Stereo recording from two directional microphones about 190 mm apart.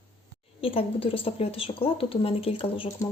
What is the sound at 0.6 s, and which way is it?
Speech, 30° left (ahead or behind).